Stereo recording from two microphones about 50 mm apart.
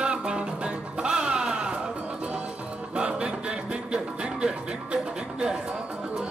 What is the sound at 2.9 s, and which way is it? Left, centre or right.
Music, centre.